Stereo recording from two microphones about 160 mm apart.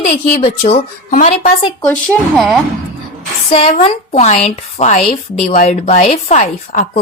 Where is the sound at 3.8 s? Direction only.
40° left (ahead or behind).